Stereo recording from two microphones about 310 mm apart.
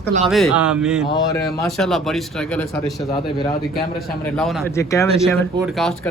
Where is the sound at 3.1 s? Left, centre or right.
Centre.